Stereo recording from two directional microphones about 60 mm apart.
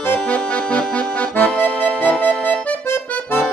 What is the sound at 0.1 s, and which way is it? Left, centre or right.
Music, left.